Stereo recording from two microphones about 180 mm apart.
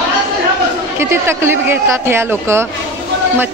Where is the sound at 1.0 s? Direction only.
15° right (ahead or behind).